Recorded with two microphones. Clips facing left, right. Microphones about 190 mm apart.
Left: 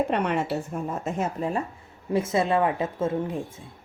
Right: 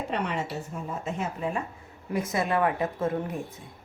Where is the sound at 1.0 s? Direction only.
40° left (ahead or behind).